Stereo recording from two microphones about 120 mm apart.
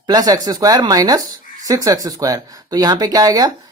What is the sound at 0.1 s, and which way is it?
Speech, 35° right (ahead or behind).